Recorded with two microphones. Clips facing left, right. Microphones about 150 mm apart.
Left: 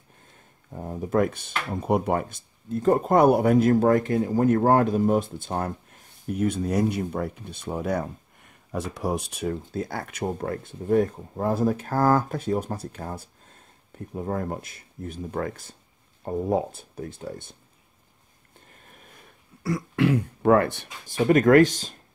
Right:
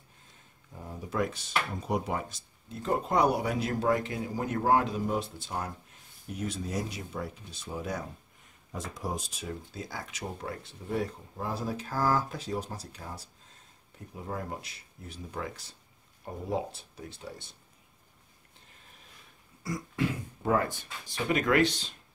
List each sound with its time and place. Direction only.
0.7 s speech: 50° left (ahead or behind)
18.9 s throat clearing: 50° left (ahead or behind); by 20.9 s 70° left (ahead or behind)
21.1 s speech: 50° left (ahead or behind)